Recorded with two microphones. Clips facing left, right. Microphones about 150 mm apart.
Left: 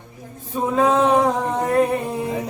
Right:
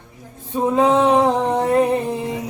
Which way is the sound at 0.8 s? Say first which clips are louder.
Right 1 dB; 25° right (ahead or behind).